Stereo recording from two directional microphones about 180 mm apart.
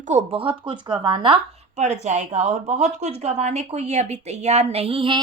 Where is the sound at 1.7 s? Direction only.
40° right (ahead or behind).